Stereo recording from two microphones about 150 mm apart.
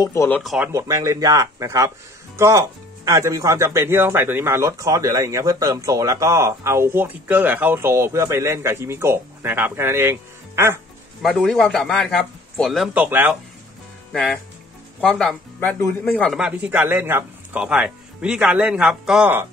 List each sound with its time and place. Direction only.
0.0 s speech: 20° left (ahead or behind)
0.4 s speech: centre (ahead or behind)
0.7 s speech: 20° right (ahead or behind)
11.2 s speech: centre (ahead or behind)
12.9 s speech: 15° right (ahead or behind)
14.1 s speech: centre (ahead or behind)
16.3 s speech: 5° right (ahead or behind)